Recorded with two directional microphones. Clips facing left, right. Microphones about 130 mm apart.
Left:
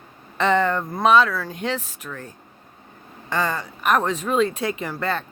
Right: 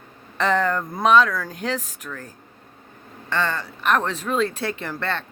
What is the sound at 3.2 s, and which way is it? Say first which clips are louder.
Speech: left 1 dB; 10° left (ahead or behind).